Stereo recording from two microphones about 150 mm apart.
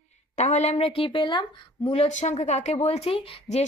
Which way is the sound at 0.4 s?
50° left (ahead or behind).